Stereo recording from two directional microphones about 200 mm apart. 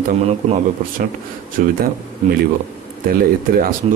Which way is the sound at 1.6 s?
45° right (ahead or behind).